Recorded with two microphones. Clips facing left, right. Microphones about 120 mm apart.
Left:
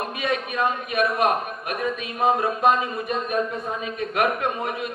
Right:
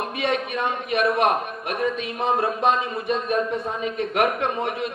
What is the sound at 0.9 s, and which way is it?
A man's voice, 30° right (ahead or behind).